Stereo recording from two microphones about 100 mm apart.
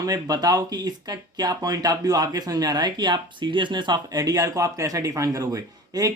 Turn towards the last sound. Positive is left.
turn(degrees=-35)  # may be behind; listen again after turning